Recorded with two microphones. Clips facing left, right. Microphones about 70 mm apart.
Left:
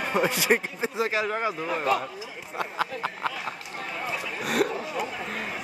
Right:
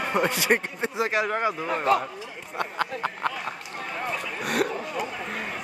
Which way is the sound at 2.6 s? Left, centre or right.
Centre.